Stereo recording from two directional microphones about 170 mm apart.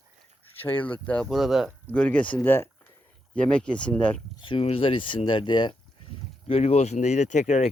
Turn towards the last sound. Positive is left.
turn(degrees=45)  # may be behind; listen again after turning